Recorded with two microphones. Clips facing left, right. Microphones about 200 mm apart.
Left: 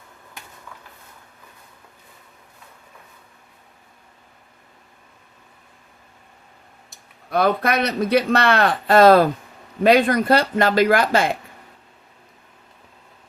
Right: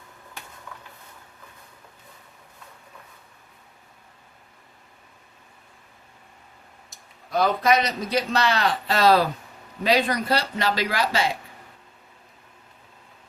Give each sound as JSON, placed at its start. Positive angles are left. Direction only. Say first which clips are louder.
{"t": 7.3, "sound": "a man's voice", "louder": "left 1 dB", "side_deg": 60}